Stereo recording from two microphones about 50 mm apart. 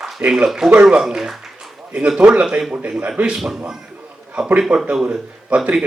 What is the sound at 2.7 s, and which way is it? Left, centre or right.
A man's voice, right.